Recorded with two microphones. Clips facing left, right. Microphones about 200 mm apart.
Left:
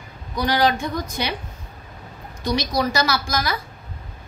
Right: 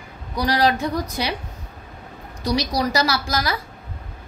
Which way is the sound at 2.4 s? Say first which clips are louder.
Even; 35° right (ahead or behind).